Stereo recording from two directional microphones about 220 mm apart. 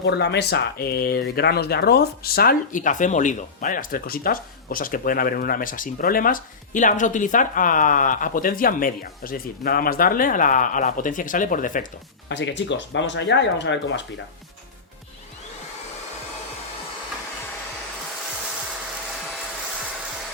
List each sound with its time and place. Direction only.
0.0 s speech: 50° left (ahead or behind)
12.3 s speech: 55° left (ahead or behind)